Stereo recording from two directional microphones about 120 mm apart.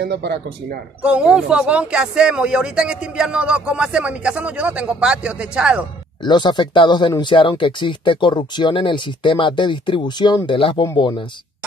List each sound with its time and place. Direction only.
1.0 s speech: 10° right (ahead or behind)
6.2 s speech: 40° left (ahead or behind)